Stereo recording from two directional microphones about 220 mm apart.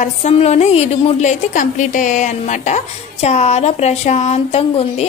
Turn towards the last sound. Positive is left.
turn(degrees=30)  # may be behind; listen again after turning